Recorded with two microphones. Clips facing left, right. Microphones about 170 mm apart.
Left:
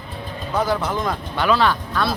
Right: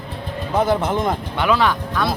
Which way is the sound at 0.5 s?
25° right (ahead or behind).